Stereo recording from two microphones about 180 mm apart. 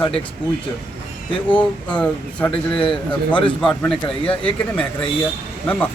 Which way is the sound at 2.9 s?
30° left (ahead or behind).